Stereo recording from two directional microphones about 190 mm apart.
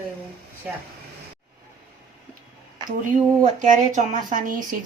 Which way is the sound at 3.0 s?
40° right (ahead or behind).